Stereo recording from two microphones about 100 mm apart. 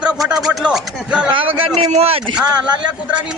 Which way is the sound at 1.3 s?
60° right (ahead or behind).